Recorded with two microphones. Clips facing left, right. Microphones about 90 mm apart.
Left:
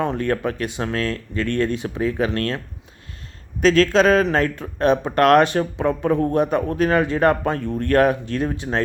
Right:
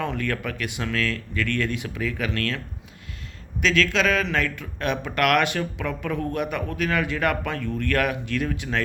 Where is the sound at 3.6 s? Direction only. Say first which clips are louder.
Left 7 dB; 40° left (ahead or behind).